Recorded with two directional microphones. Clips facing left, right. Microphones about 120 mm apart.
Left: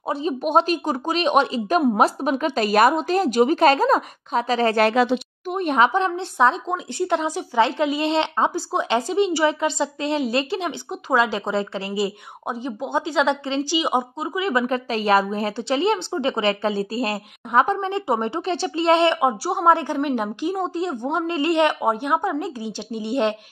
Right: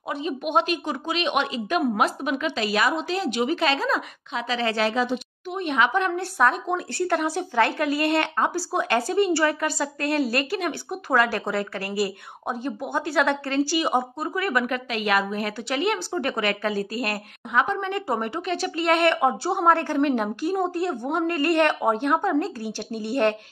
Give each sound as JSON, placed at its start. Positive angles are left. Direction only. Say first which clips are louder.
{"t": 0.1, "sound": "a woman's voice", "louder": "left 4 dB", "side_deg": 35}
{"t": 4.8, "sound": "speech", "louder": "left 5 dB", "side_deg": 75}
{"t": 5.5, "sound": "speech", "louder": "left 4 dB", "side_deg": 40}
{"t": 14.5, "sound": "speech", "louder": "left 3 dB", "side_deg": 25}
{"t": 19.1, "sound": "a woman's voice", "louder": "left 1 dB", "side_deg": 10}